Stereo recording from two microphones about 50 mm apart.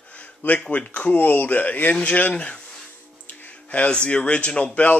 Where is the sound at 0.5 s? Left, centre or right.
Left.